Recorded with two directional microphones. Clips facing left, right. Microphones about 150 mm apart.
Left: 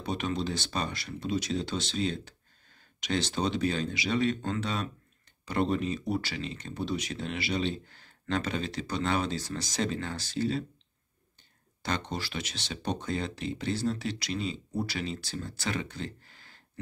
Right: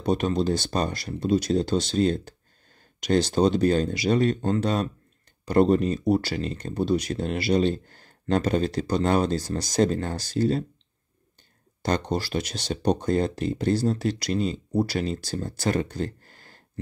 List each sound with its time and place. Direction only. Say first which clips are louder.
0.0 s speech: right 8 dB; 40° right (ahead or behind)
11.8 s speech: right 8 dB; 40° right (ahead or behind)